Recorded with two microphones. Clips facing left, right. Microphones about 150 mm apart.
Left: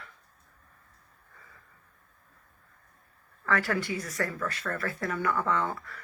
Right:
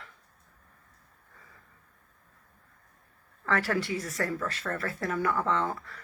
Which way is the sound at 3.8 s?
Centre (ahead or behind).